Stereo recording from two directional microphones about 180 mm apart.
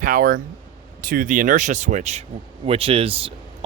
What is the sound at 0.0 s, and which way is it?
Speech, 50° right (ahead or behind).